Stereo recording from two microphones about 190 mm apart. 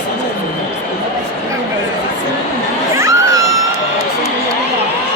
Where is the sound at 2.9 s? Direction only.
15° right (ahead or behind).